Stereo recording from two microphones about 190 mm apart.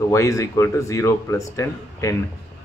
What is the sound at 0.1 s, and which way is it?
A man's voice, 15° left (ahead or behind).